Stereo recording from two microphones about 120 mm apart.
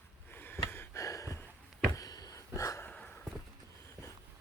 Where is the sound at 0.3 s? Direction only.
15° left (ahead or behind).